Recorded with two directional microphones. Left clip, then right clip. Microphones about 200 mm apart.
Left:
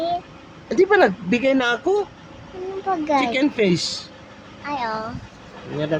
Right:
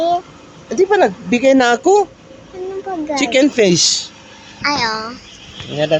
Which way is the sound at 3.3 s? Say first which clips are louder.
Right 8 dB; 35° right (ahead or behind).